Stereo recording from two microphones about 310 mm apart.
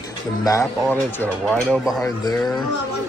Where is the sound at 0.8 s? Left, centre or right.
Centre.